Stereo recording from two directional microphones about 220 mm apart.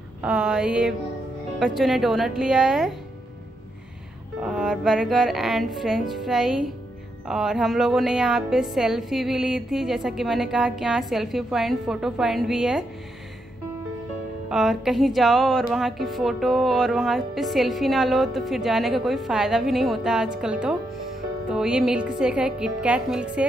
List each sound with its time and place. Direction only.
0.2 s speech: 5° right (ahead or behind)
4.4 s speech: 5° right (ahead or behind)
14.5 s speech: centre (ahead or behind)